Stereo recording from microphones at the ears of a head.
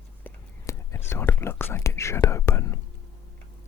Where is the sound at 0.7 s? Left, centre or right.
Left.